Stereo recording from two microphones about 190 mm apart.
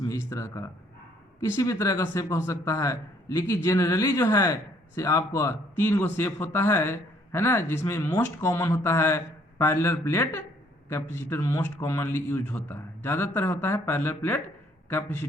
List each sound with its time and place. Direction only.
0.1 s a man's voice: 15° left (ahead or behind)